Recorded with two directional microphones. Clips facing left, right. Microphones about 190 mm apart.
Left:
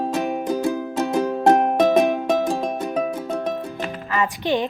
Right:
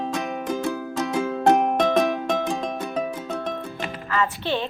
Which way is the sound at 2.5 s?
30° left (ahead or behind).